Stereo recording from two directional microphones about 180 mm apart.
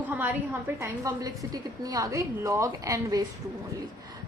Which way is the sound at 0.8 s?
20° right (ahead or behind).